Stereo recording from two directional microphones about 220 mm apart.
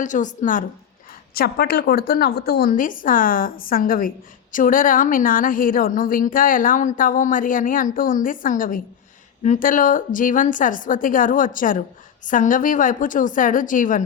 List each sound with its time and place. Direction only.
0.0 s a woman's voice: 35° left (ahead or behind)